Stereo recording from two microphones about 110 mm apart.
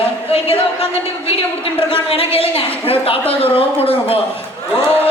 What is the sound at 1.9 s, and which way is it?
A woman's voice, 60° left (ahead or behind).